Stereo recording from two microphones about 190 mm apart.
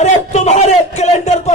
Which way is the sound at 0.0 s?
35° left (ahead or behind).